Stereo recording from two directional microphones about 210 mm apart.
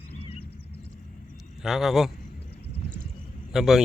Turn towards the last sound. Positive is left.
turn(degrees=0)  # may be behind; listen again after turning